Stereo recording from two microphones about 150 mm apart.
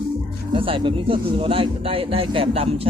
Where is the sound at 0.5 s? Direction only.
35° right (ahead or behind).